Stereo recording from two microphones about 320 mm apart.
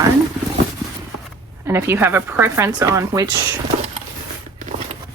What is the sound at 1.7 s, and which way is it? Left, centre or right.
Speech, centre.